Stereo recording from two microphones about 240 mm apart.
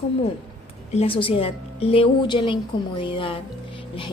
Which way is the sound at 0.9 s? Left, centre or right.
Left.